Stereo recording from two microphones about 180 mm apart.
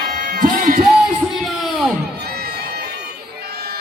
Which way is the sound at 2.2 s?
65° right (ahead or behind).